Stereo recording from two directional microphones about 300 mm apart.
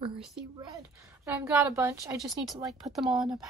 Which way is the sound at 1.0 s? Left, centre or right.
Centre.